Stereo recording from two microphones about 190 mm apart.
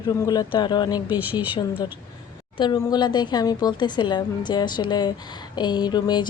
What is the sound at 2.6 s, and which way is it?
Speech, 25° left (ahead or behind).